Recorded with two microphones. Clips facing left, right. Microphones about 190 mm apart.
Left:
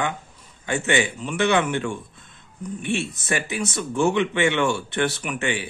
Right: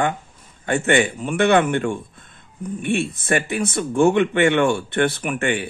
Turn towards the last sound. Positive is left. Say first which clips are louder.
# right 4 dB
turn(degrees=-55)  # may be behind; listen again after turning